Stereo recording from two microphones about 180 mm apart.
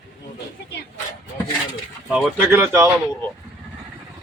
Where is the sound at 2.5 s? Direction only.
15° right (ahead or behind).